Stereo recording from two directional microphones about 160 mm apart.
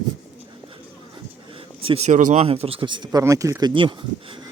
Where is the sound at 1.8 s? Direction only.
35° right (ahead or behind).